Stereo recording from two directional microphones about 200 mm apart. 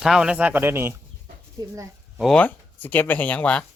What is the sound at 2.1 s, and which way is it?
Speech, centre (ahead or behind).